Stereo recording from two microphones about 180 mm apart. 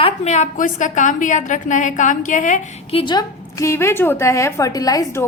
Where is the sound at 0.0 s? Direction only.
40° left (ahead or behind).